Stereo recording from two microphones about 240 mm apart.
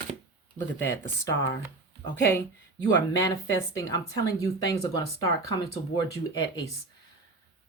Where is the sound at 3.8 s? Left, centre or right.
Centre.